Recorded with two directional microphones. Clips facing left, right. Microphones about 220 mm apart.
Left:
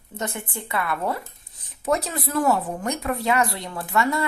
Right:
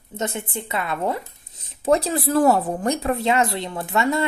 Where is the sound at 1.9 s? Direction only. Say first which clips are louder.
Right 5 dB; 30° right (ahead or behind).